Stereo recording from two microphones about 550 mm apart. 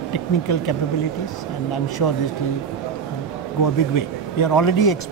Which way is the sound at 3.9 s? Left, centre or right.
Left.